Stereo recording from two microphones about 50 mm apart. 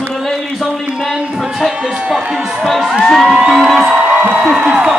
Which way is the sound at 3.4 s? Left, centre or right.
Centre.